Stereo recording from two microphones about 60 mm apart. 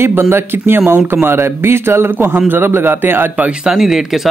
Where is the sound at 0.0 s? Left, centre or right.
Right.